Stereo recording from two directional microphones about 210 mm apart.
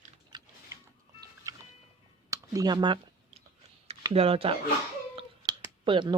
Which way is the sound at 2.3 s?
15° right (ahead or behind).